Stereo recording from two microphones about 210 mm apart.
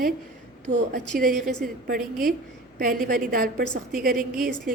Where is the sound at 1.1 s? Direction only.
40° right (ahead or behind).